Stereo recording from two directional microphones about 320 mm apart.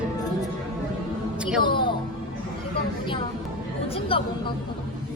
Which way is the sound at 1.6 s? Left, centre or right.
Centre.